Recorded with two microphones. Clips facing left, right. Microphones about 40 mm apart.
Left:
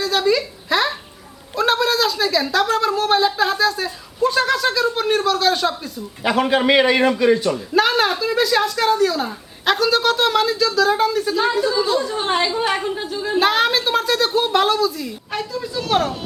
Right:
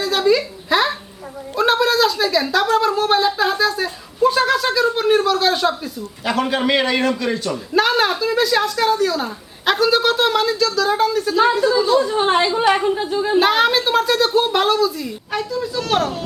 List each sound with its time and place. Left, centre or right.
0.0 s a sound: centre
1.5 s speech: centre
6.2 s a man's voice: centre
7.5 s speech: centre
12.0 s speech: centre
13.1 s speech: centre
13.4 s a man's voice: centre